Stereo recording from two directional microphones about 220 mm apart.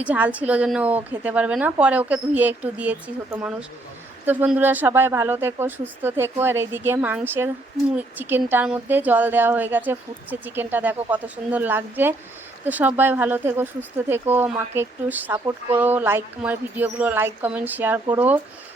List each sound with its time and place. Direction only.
0.0 s speech: 5° right (ahead or behind)